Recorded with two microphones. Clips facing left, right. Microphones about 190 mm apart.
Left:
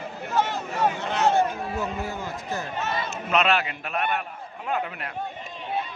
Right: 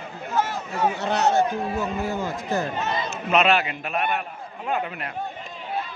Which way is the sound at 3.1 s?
5° right (ahead or behind).